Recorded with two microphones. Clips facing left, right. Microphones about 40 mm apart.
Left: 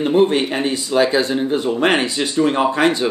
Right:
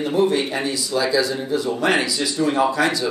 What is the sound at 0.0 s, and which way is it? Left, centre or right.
Speech, left.